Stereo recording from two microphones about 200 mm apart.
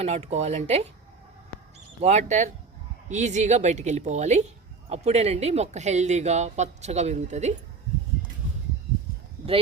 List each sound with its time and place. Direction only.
0.0 s speech: 35° right (ahead or behind)
2.0 s speech: 35° right (ahead or behind)